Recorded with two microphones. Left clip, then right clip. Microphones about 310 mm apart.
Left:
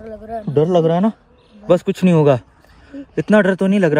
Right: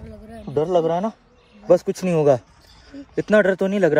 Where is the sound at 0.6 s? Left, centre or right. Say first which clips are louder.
Left 4 dB; left.